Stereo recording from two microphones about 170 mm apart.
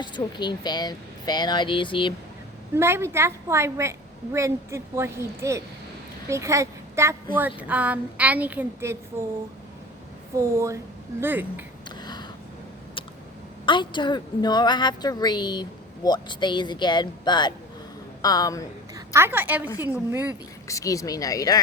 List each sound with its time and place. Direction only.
0.0 s speech: 25° left (ahead or behind)
2.7 s a woman's voice: 15° right (ahead or behind)
10.3 s a woman's voice: 15° right (ahead or behind)
11.9 s a sound: 25° left (ahead or behind)
13.7 s speech: 30° left (ahead or behind)
18.9 s a woman's voice: 15° right (ahead or behind)
20.7 s speech: 20° left (ahead or behind)